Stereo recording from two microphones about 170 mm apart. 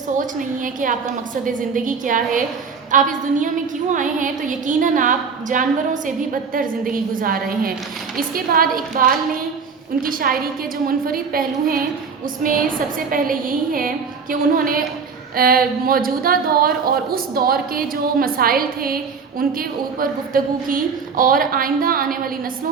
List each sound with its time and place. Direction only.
0.2 s a woman's voice: 50° right (ahead or behind)